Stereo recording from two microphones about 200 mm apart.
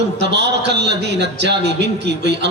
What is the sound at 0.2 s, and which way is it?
A man's voice, 60° right (ahead or behind).